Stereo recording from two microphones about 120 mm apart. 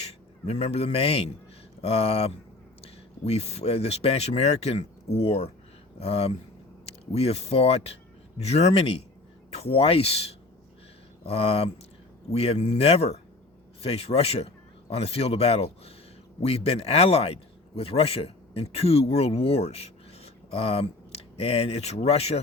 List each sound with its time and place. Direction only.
0.0 s a man's voice: 60° left (ahead or behind)